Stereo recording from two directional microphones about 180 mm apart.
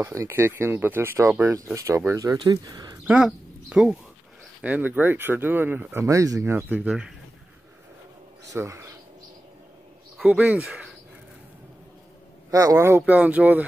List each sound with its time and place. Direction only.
0.0 s speech: 15° right (ahead or behind)
3.1 s speech: 5° right (ahead or behind)
8.5 s speech: 15° right (ahead or behind)
10.1 s speech: 5° right (ahead or behind)
12.4 s speech: 20° right (ahead or behind)